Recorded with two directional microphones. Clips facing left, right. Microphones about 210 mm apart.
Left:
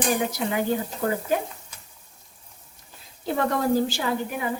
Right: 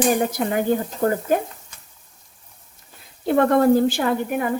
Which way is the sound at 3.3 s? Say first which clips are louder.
Right 7 dB; 55° right (ahead or behind).